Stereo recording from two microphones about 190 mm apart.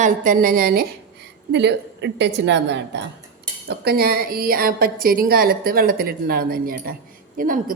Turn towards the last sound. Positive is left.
turn(degrees=-45)  # may be behind; listen again after turning